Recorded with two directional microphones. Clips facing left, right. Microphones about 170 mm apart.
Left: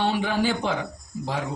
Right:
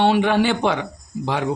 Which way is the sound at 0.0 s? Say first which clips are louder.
Right 7 dB; 70° right (ahead or behind).